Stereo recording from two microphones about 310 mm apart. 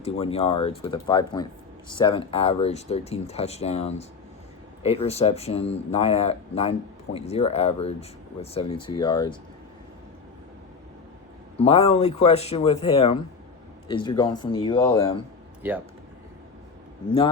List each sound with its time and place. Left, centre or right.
0.0 s speech: centre
11.5 s speech: centre